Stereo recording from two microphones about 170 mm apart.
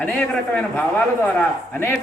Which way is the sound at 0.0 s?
10° left (ahead or behind).